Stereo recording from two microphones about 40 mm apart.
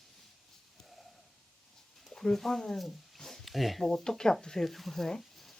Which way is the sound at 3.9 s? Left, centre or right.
Centre.